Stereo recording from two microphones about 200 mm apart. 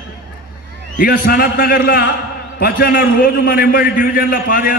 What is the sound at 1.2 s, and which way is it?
A man's voice, 45° left (ahead or behind).